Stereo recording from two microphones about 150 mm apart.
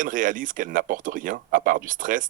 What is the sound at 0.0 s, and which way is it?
Speech, 65° right (ahead or behind).